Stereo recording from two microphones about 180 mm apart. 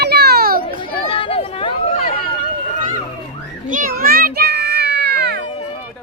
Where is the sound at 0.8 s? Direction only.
30° left (ahead or behind).